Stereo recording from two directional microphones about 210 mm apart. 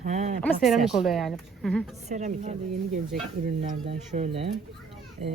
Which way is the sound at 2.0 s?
35° right (ahead or behind).